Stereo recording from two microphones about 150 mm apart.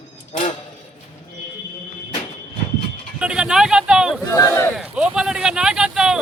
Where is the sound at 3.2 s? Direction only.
5° right (ahead or behind).